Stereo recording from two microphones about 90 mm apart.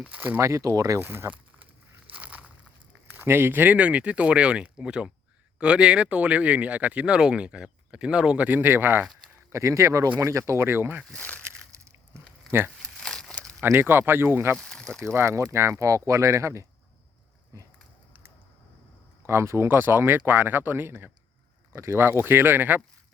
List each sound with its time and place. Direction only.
0.0 s speech: 20° right (ahead or behind); by 1.0 s 35° right (ahead or behind)
1.0 s speech: 25° right (ahead or behind)
2.1 s a sound: 15° right (ahead or behind)
3.2 s speech: 25° right (ahead or behind)
8.4 s speech: 20° right (ahead or behind)
11.1 s a sound: 15° left (ahead or behind)
12.5 s speech: 25° right (ahead or behind)
13.0 s crumpling: 5° left (ahead or behind)
13.6 s speech: 25° right (ahead or behind)
14.5 s speech: 10° left (ahead or behind)
15.0 s speech: 30° right (ahead or behind)
19.2 s speech: 30° right (ahead or behind)